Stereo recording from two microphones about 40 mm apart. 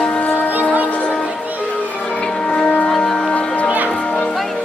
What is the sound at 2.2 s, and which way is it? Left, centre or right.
Music, left.